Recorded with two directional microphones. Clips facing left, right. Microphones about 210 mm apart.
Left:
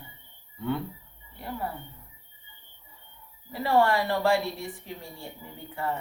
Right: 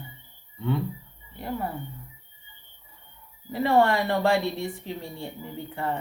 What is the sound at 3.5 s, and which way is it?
A woman's voice, 25° right (ahead or behind).